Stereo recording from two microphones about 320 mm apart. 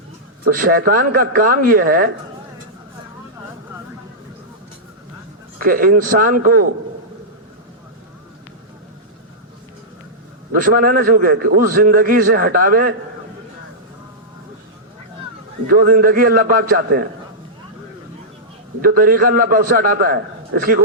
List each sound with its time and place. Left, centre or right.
0.4 s a man's voice: right
5.5 s a man's voice: right
10.5 s a man's voice: right
15.6 s a man's voice: right
18.8 s a man's voice: right